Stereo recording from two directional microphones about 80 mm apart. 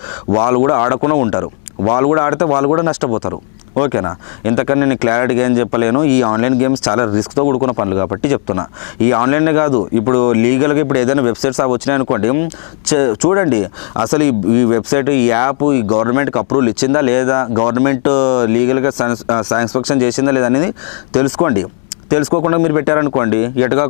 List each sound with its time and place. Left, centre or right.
0.3 s speech: left